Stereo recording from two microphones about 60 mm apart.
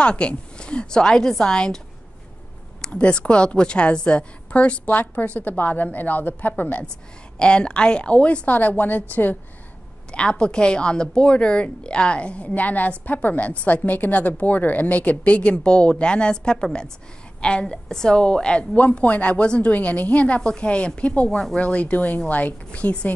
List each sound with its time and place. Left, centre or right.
0.0 s a woman's voice: centre
2.8 s a woman's voice: centre
7.3 s a woman's voice: centre
10.1 s a woman's voice: centre
21.3 s a woman's voice: centre
21.5 s a woman's voice: left